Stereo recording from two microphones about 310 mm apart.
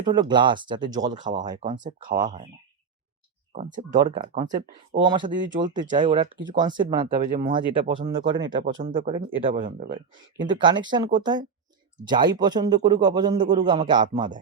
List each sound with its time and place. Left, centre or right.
0.0 s a man's voice: centre
3.5 s speech: right
5.0 s a man's voice: centre
5.3 s a man's voice: right
7.1 s speech: right
8.4 s speech: right
10.6 s a man's voice: centre